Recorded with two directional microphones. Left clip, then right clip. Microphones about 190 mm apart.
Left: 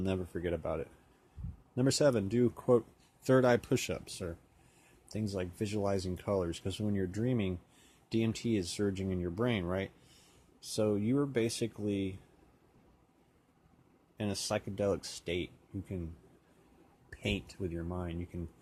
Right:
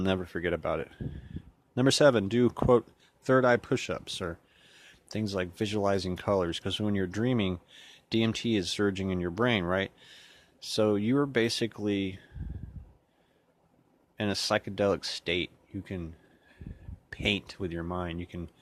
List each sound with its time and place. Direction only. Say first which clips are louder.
0.0 s speech: right 6 dB; 35° right (ahead or behind)
3.2 s speech: right 4 dB; 20° right (ahead or behind)
14.2 s speech: right 7 dB; 35° right (ahead or behind)
17.1 s speech: right 7 dB; 35° right (ahead or behind)